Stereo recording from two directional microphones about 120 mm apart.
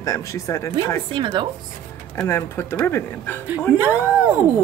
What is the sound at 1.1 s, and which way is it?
Speech, 45° right (ahead or behind).